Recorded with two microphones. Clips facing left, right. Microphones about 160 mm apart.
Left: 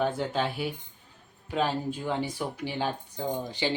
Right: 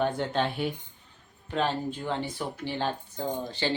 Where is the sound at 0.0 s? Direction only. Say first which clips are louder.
Right 1 dB; 5° left (ahead or behind).